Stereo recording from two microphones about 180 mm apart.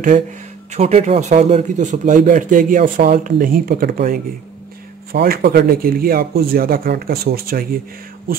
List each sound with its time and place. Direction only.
0.7 s a man's voice: 40° right (ahead or behind); by 7.6 s 55° right (ahead or behind)